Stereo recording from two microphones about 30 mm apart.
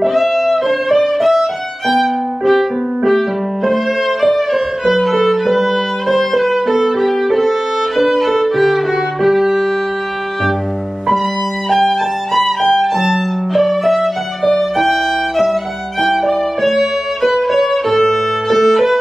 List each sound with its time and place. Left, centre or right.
0.0 s music: centre
0.9 s violin: centre
9.2 s music: centre
11.7 s music: centre
14.8 s violin: centre